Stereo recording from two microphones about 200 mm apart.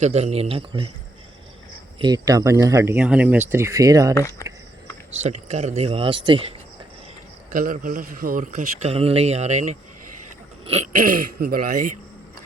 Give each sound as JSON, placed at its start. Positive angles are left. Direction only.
{"t": 0.0, "sound": "a man's voice", "side_deg": -30}
{"t": 2.0, "sound": "speech", "side_deg": -20}
{"t": 4.1, "sound": "speech", "side_deg": 15}
{"t": 5.1, "sound": "a man's voice", "side_deg": -35}
{"t": 7.5, "sound": "a man's voice", "side_deg": -45}